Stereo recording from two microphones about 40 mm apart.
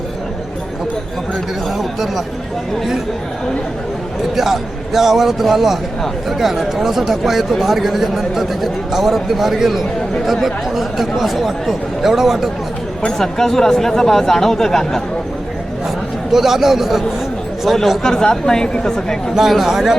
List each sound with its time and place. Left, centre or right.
1.8 s speech: centre
4.4 s speech: centre
13.1 s speech: centre
16.3 s speech: centre
17.7 s speech: centre
18.0 s speech: centre
19.4 s speech: centre